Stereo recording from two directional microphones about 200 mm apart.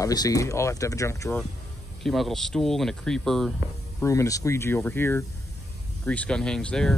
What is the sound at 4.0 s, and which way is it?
Speech, 15° left (ahead or behind).